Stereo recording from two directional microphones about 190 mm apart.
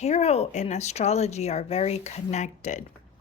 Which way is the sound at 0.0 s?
35° left (ahead or behind).